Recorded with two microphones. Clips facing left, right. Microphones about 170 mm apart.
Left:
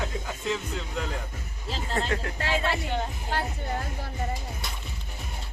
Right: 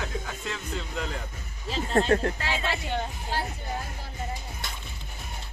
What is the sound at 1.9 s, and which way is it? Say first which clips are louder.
Speech: right 7 dB; 40° right (ahead or behind).